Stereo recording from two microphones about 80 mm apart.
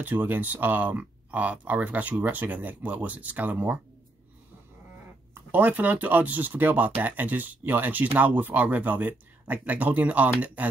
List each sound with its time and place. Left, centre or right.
0.0 s speech: right
5.5 s speech: right